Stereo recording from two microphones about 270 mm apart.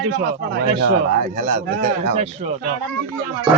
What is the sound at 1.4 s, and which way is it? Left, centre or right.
Speech, right.